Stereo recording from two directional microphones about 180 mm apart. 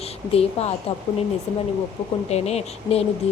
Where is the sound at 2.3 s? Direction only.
35° left (ahead or behind).